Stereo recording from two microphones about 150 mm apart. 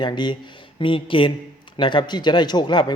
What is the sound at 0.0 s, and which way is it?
A man's voice, 30° left (ahead or behind).